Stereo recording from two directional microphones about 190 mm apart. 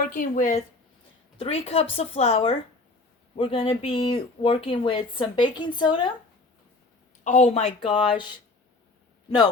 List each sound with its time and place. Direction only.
0.0 s a woman's voice: 45° left (ahead or behind)
1.4 s speech: 30° left (ahead or behind)
7.3 s speech: 40° left (ahead or behind)